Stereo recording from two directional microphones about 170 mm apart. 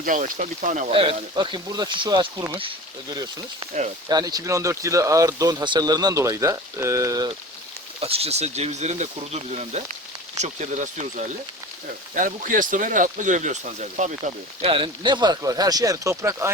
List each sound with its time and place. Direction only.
0.0 s speech: 50° right (ahead or behind)
0.9 s speech: 30° right (ahead or behind)
8.0 s speech: 35° right (ahead or behind)
14.6 s speech: 30° right (ahead or behind)